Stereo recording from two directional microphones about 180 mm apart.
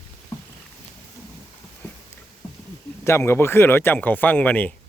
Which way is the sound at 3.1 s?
15° left (ahead or behind).